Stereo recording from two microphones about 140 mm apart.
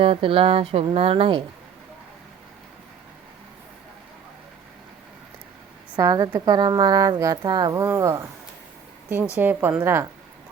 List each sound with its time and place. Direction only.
0.0 s a sound: 40° right (ahead or behind)
0.9 s speech: 45° right (ahead or behind)
6.0 s speech: 25° right (ahead or behind)
9.4 s a woman's voice: 15° right (ahead or behind)